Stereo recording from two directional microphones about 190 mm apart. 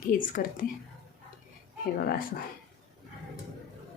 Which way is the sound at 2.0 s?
55° left (ahead or behind).